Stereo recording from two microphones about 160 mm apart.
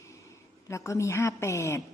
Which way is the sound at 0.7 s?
20° left (ahead or behind).